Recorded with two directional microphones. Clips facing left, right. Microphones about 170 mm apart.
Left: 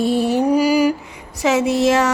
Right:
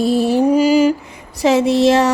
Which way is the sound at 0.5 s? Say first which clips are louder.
Right 2 dB; 25° right (ahead or behind).